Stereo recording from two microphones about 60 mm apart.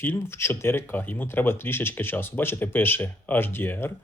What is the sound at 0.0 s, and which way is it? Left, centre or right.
Speech, left.